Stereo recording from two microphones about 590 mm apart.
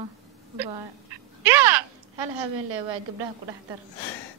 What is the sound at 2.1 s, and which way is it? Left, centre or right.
A woman's voice, right.